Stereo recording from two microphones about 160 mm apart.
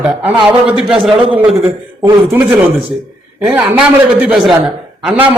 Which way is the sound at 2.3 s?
10° right (ahead or behind).